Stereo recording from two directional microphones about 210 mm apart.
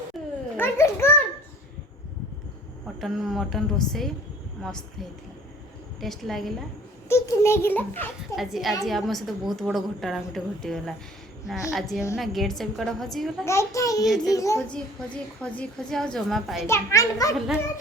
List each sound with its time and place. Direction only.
0.5 s a child's voice: 10° left (ahead or behind)
3.0 s a woman's voice: centre (ahead or behind)
6.0 s a woman's voice: centre (ahead or behind)
7.1 s a child's voice: 10° left (ahead or behind)
8.4 s a woman's voice: centre (ahead or behind)
13.4 s a child's voice: 15° left (ahead or behind)
14.0 s a woman's voice: centre (ahead or behind)
14.3 s a child's voice: 15° left (ahead or behind)
16.6 s a child's voice: 15° left (ahead or behind)
17.3 s a woman's voice: centre (ahead or behind)